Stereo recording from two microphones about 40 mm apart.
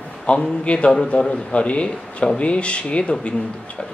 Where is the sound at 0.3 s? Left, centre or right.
Left.